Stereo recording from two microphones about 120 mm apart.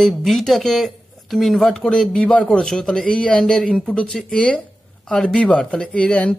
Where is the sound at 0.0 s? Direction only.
Centre (ahead or behind).